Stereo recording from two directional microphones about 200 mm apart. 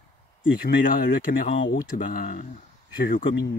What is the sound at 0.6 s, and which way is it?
Speech, 45° left (ahead or behind).